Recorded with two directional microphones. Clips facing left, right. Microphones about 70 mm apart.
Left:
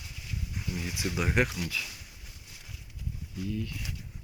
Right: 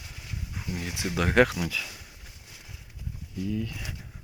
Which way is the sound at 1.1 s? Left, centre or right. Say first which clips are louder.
Right 7 dB; right.